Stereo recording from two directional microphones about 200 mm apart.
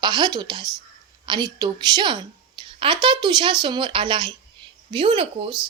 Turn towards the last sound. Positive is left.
turn(degrees=-25)  # may be behind; listen again after turning